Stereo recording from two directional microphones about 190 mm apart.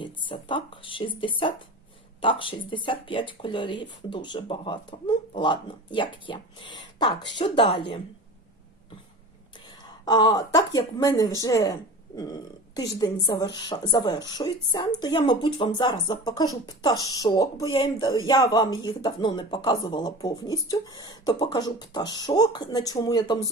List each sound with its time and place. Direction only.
0.0 s a woman's voice: 25° left (ahead or behind)
9.6 s a woman's voice: 20° left (ahead or behind)